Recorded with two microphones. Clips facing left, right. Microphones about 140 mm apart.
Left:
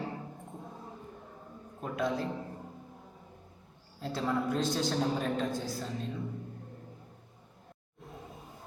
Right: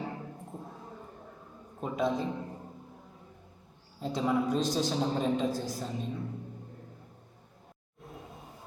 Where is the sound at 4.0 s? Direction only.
15° right (ahead or behind).